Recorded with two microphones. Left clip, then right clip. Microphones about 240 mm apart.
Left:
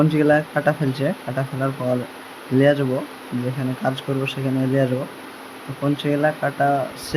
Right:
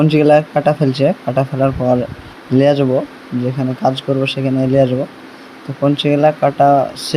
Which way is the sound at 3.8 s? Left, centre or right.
Centre.